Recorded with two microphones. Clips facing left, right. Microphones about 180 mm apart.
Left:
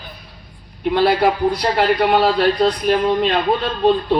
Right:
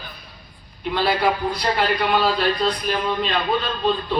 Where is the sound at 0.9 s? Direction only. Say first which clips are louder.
Left 5 dB; 60° left (ahead or behind).